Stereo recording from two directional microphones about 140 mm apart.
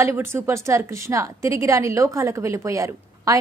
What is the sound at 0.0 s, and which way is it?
A woman's voice, 20° right (ahead or behind).